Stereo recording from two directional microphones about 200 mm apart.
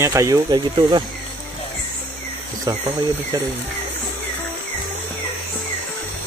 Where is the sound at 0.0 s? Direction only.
15° right (ahead or behind).